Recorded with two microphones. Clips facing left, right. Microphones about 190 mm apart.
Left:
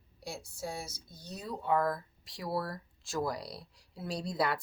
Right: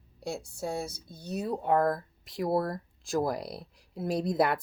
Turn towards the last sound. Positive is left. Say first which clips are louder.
# right 6 dB
turn(degrees=-50)  # may be behind; listen again after turning